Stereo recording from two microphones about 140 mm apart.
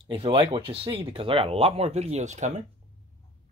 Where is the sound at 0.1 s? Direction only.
40° right (ahead or behind); by 2.6 s 60° right (ahead or behind).